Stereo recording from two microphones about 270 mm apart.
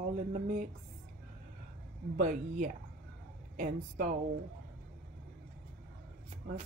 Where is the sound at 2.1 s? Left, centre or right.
Right.